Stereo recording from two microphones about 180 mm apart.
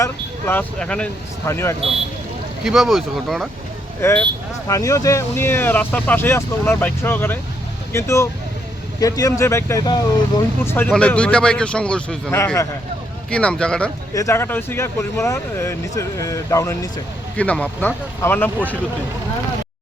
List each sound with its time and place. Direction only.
0.0 s speech: 10° left (ahead or behind)
2.6 s speech: centre (ahead or behind)
4.0 s speech: 10° left (ahead or behind)
14.1 s speech: 15° left (ahead or behind)